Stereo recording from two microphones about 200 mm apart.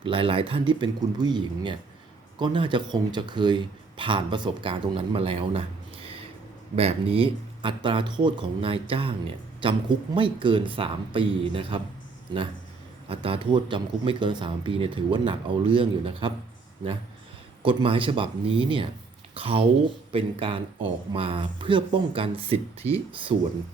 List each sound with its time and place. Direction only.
0.0 s speech: 25° right (ahead or behind)
13.1 s speech: 25° right (ahead or behind)
17.6 s speech: 25° right (ahead or behind)